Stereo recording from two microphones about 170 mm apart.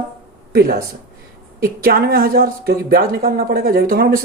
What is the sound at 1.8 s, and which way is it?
Speech, 60° right (ahead or behind).